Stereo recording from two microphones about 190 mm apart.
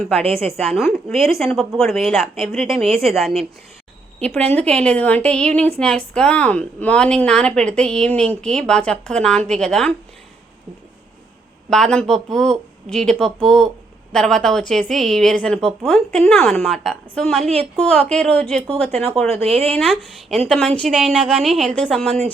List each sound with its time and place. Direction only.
0.2 s speech: 30° right (ahead or behind)
0.6 s a woman's voice: centre (ahead or behind)
11.7 s a woman's voice: 5° left (ahead or behind)
19.3 s speech: 30° right (ahead or behind)
20.5 s a woman's voice: 5° left (ahead or behind)